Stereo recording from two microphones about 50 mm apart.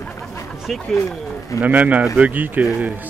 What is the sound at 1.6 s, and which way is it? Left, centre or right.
Speech, right.